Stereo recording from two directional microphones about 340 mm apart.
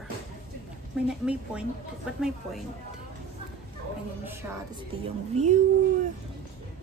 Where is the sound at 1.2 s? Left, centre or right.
Centre.